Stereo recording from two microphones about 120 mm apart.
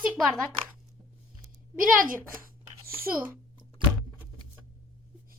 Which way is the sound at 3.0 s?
15° right (ahead or behind).